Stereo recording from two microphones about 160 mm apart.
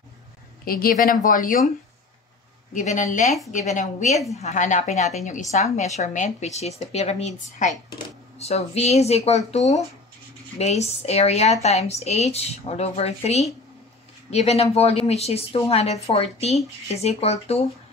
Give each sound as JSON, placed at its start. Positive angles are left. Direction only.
{"t": 0.7, "sound": "speech", "side_deg": 65}
{"t": 2.7, "sound": "a woman's voice", "side_deg": 50}